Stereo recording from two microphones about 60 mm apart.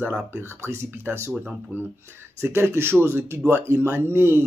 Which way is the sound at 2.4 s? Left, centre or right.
Right.